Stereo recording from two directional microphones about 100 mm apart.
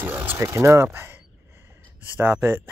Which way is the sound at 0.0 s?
20° right (ahead or behind).